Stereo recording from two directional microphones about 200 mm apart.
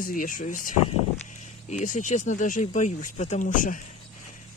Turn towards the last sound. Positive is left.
turn(degrees=40)  # may be behind; listen again after turning